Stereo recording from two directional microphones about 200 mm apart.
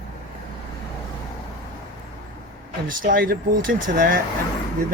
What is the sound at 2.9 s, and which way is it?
Speech, 45° right (ahead or behind).